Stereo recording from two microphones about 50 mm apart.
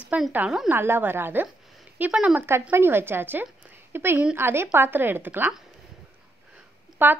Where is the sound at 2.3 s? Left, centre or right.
Right.